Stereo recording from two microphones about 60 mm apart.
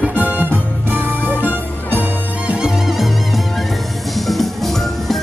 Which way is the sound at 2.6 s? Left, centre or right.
Centre.